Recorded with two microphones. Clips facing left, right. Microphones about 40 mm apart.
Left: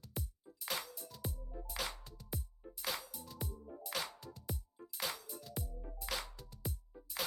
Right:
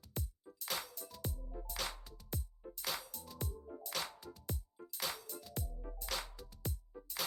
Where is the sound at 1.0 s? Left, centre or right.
Right.